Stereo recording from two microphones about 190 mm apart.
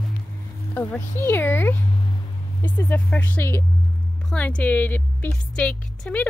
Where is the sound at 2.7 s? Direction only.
10° left (ahead or behind).